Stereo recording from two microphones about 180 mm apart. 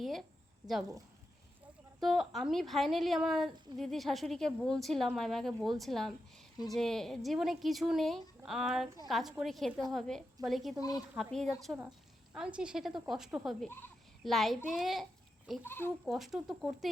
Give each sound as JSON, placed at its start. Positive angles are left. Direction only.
{"t": 0.0, "sound": "a woman's voice", "side_deg": 0}
{"t": 2.0, "sound": "a woman's voice", "side_deg": 0}
{"t": 10.8, "sound": "speech", "side_deg": 20}
{"t": 11.1, "sound": "a woman's voice", "side_deg": 0}
{"t": 15.6, "sound": "speech", "side_deg": 10}
{"t": 16.0, "sound": "a woman's voice", "side_deg": 0}